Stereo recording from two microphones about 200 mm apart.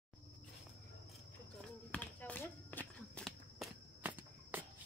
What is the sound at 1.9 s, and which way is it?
Walk, 5° left (ahead or behind).